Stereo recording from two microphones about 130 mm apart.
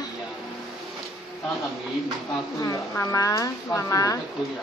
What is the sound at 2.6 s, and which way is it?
Speech, 25° left (ahead or behind).